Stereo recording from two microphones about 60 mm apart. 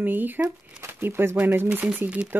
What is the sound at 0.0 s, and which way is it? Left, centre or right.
Speech, right.